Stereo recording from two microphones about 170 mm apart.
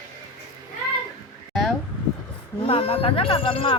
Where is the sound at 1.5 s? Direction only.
Centre (ahead or behind).